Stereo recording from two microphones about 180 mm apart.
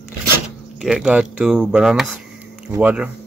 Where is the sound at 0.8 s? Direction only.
5° right (ahead or behind).